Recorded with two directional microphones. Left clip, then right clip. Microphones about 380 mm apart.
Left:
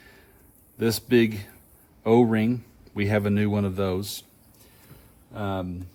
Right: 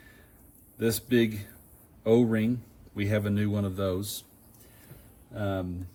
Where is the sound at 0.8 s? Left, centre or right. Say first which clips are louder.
Left 4 dB; centre.